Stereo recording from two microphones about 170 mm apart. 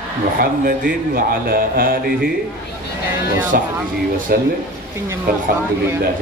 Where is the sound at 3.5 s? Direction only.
60° right (ahead or behind).